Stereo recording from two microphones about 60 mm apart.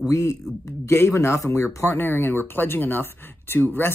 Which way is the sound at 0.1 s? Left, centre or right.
Left.